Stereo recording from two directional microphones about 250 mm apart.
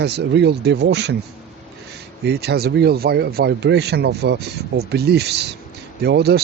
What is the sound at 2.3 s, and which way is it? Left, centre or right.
Speech, right.